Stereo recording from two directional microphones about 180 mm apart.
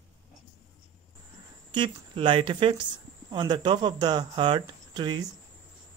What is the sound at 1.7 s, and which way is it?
Speech, 25° right (ahead or behind).